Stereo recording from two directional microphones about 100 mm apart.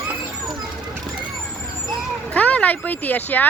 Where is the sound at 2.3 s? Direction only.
15° left (ahead or behind).